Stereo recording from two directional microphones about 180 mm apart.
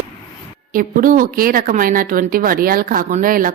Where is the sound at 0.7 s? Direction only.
50° right (ahead or behind).